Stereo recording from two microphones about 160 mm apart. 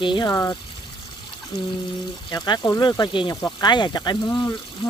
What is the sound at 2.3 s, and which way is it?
Speech, 25° left (ahead or behind).